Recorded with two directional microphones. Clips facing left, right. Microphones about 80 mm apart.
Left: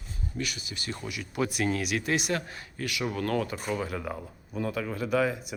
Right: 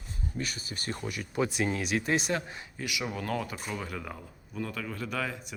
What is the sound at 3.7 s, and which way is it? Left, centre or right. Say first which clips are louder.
Speech: left 5 dB; centre.